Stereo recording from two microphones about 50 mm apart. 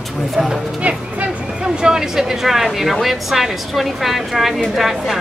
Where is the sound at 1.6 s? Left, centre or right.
Centre.